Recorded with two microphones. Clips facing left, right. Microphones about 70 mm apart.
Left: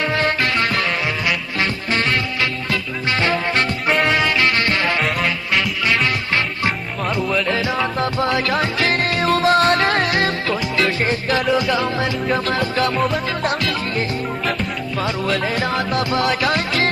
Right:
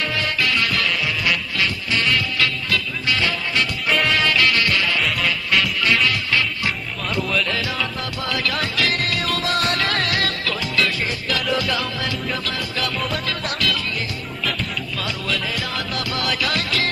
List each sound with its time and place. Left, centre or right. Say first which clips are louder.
0.0 s music: left 4 dB; left
4.0 s music: even; left
5.2 s music: left 1 dB; centre
6.0 s music: left 1 dB; left
15.0 s music: left 6 dB; left